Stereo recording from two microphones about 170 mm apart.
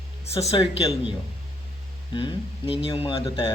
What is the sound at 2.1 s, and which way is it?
Speech, 30° left (ahead or behind).